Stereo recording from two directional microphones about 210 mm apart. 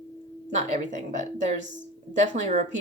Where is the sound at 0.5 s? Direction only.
35° right (ahead or behind).